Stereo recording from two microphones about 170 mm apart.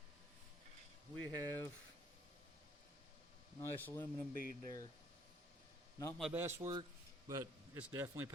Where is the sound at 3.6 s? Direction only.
10° left (ahead or behind).